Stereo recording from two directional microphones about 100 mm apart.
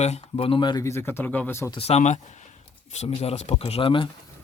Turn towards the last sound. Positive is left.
turn(degrees=60)  # may be behind; listen again after turning